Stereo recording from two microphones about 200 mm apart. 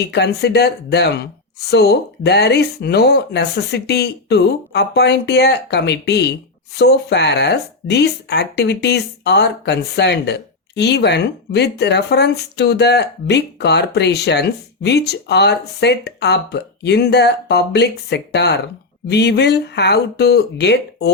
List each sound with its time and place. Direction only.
0.0 s speech: 55° left (ahead or behind)